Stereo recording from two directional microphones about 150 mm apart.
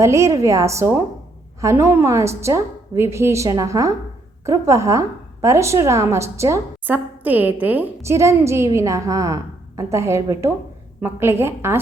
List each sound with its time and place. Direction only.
0.0 s a woman's voice: 20° right (ahead or behind)